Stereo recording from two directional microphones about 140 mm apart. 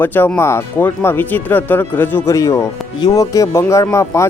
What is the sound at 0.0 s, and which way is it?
Speech, 15° left (ahead or behind).